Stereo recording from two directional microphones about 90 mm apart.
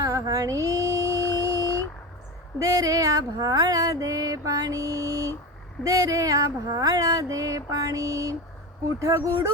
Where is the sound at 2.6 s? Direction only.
40° right (ahead or behind).